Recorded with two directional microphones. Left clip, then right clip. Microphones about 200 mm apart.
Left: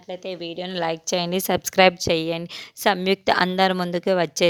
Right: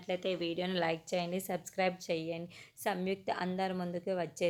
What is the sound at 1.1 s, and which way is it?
A woman's voice, 50° left (ahead or behind).